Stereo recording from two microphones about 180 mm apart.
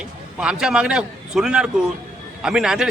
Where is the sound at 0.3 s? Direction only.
5° right (ahead or behind).